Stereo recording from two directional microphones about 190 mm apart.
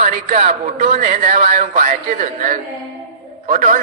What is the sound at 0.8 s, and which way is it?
A man's voice, 50° right (ahead or behind).